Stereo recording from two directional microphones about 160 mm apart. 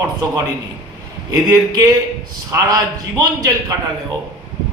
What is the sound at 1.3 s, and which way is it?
Speech, 20° right (ahead or behind).